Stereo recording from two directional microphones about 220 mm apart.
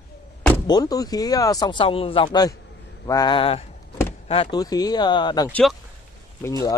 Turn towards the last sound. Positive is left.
turn(degrees=15)  # may be behind; listen again after turning